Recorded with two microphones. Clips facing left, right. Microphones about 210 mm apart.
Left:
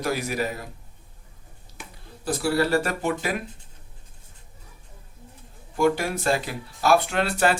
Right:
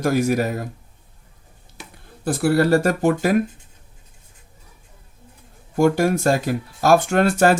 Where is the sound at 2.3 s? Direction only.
45° right (ahead or behind).